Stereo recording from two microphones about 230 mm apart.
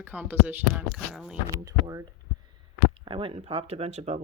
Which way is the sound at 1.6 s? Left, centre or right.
Centre.